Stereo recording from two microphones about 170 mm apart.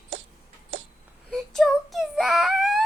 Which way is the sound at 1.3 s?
Centre (ahead or behind).